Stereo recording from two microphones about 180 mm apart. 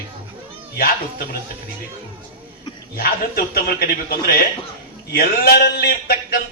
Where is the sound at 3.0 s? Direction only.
55° left (ahead or behind).